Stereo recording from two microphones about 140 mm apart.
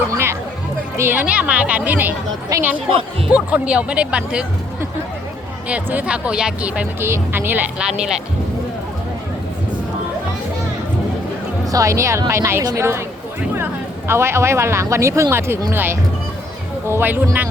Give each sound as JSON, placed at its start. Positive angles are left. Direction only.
{"t": 0.1, "sound": "music", "side_deg": -20}
{"t": 0.9, "sound": "speech", "side_deg": -15}
{"t": 11.7, "sound": "speech", "side_deg": -25}
{"t": 14.1, "sound": "speech", "side_deg": -20}